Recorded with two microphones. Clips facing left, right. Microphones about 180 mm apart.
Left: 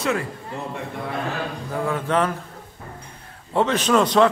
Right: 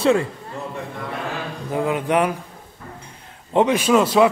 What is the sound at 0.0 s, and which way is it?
Speech, 30° right (ahead or behind).